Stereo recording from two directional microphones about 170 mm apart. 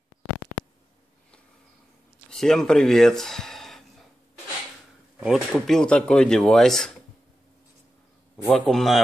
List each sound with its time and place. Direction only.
2.3 s speech: 5° left (ahead or behind)
5.2 s speech: centre (ahead or behind)
8.5 s speech: centre (ahead or behind)